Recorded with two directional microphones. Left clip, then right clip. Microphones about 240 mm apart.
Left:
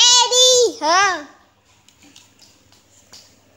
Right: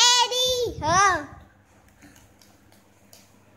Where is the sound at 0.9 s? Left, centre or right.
Centre.